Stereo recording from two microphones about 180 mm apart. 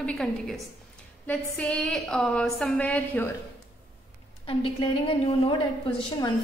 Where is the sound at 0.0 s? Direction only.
5° left (ahead or behind).